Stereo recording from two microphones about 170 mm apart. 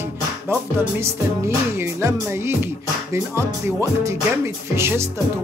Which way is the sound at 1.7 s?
15° right (ahead or behind).